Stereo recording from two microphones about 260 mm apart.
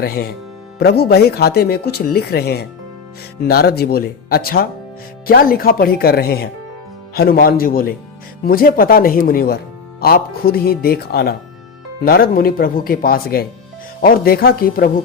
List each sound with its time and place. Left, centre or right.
0.0 s speech: left